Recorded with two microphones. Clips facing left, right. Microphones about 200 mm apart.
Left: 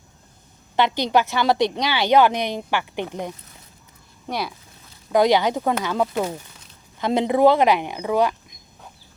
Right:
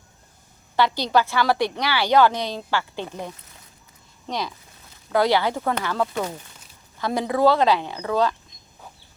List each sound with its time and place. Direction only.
0.8 s a woman's voice: 20° left (ahead or behind)